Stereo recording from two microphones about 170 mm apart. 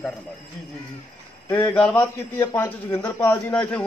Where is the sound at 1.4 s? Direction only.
10° left (ahead or behind).